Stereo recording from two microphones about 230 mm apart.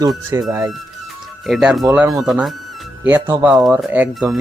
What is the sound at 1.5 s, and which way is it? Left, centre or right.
Speech, centre.